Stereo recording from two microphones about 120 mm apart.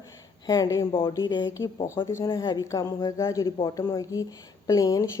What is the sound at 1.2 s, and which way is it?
A woman's voice, 40° left (ahead or behind).